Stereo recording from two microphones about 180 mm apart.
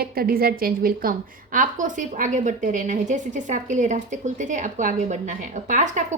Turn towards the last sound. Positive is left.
turn(degrees=-45)  # may be behind; listen again after turning